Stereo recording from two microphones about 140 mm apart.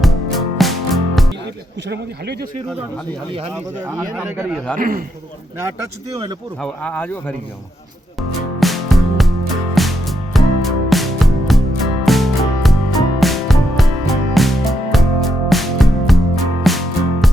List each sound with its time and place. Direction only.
0.6 s music: centre (ahead or behind)
4.8 s a man's voice: 90° right
6.6 s speech: 10° left (ahead or behind)
8.6 s music: centre (ahead or behind)